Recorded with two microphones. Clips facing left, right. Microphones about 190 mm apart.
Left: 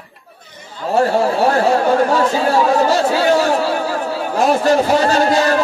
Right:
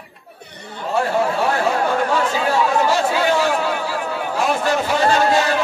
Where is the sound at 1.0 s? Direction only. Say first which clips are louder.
Left 4 dB; 40° left (ahead or behind).